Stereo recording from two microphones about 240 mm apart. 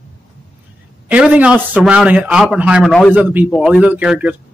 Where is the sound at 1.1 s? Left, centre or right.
Centre.